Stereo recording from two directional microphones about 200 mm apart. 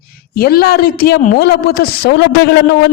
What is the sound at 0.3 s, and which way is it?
A woman's voice, 50° left (ahead or behind).